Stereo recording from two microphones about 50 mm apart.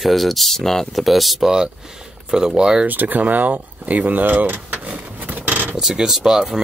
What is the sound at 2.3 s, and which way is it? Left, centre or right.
Speech, centre.